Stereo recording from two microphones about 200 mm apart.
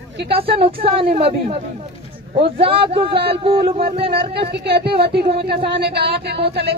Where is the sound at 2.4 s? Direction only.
25° right (ahead or behind).